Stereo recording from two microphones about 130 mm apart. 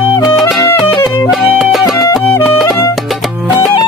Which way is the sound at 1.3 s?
Centre (ahead or behind).